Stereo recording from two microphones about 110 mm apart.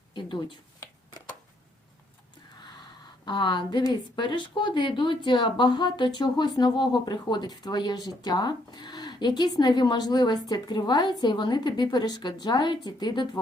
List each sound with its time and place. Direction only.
0.1 s speech: 45° left (ahead or behind)
3.2 s a woman's voice: 45° left (ahead or behind)